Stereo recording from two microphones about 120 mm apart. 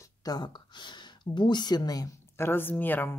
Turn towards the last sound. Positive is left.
turn(degrees=15)  # may be behind; listen again after turning